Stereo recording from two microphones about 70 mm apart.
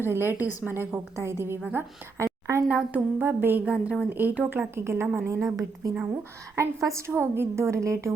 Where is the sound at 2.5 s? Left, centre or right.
Right.